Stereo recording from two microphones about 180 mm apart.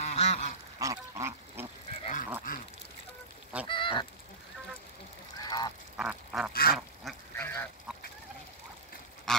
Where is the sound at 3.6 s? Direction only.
30° left (ahead or behind).